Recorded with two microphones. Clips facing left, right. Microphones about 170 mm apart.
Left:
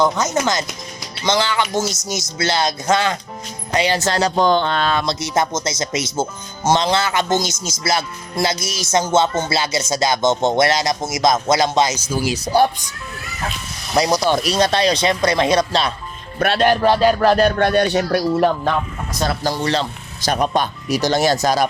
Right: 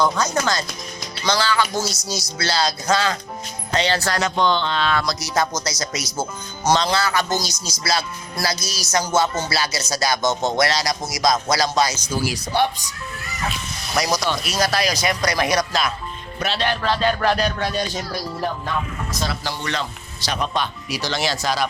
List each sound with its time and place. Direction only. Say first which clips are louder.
0.0 s speech: left 3 dB; 20° left (ahead or behind)
4.2 s speech: left 6 dB; 40° left (ahead or behind)
4.9 s speech: left 2 dB; 25° left (ahead or behind)
13.9 s speech: left 5 dB; 30° left (ahead or behind)
16.4 s speech: left 8 dB; 50° left (ahead or behind)
16.8 s speech: left 6 dB; 10° left (ahead or behind)
17.2 s speech: left 6 dB; 50° left (ahead or behind); by 18.7 s 75° left (ahead or behind)
19.2 s speech: left 8 dB; 50° left (ahead or behind)
19.6 s speech: left 6 dB; 30° left (ahead or behind)
20.2 s speech: left 6 dB; 50° left (ahead or behind)